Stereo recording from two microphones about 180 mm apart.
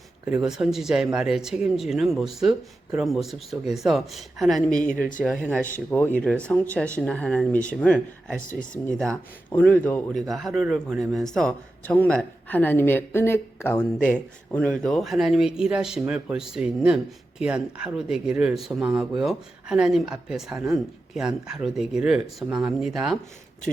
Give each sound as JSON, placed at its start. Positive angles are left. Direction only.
{"t": 0.4, "sound": "speech", "side_deg": 0}
{"t": 8.4, "sound": "speech", "side_deg": 45}
{"t": 8.9, "sound": "speech", "side_deg": 5}